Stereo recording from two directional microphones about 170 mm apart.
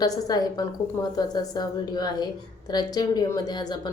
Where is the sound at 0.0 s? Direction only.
20° left (ahead or behind).